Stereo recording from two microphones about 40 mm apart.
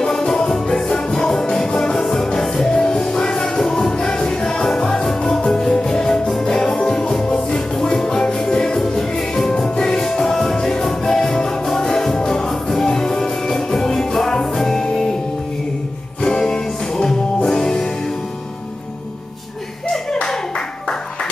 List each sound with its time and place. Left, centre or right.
0.0 s music: centre
16.2 s music: centre
19.9 s clapping: centre